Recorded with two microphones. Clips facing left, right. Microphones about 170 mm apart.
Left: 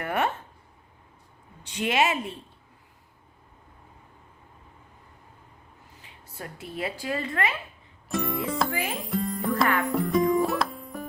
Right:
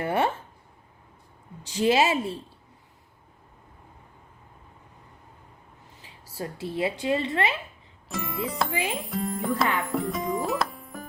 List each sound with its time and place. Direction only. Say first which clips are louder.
0.0 s speech: right 2 dB; 30° right (ahead or behind)
1.7 s a woman's voice: right 3 dB; 30° right (ahead or behind)
6.3 s a woman's voice: right 5 dB; 25° right (ahead or behind)
8.1 s music: left 3 dB; centre (ahead or behind)
9.7 s speech: left 4 dB; centre (ahead or behind)
10.3 s music: left 3 dB; centre (ahead or behind)